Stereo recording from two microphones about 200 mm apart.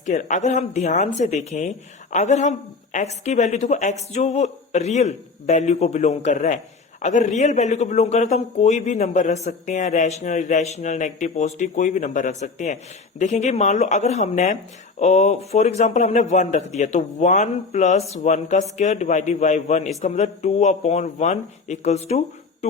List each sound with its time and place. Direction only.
0.0 s speech: 35° left (ahead or behind)